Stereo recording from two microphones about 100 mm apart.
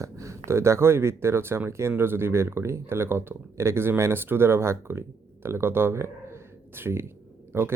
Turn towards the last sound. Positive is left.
turn(degrees=-25)  # may be behind; listen again after turning